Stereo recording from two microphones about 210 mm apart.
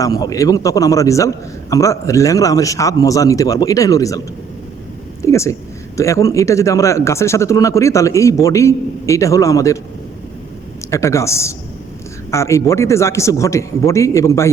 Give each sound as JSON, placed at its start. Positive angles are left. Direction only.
{"t": 0.0, "sound": "speech", "side_deg": 15}
{"t": 5.2, "sound": "a sound", "side_deg": 15}
{"t": 6.0, "sound": "speech", "side_deg": 15}
{"t": 10.9, "sound": "speech", "side_deg": 15}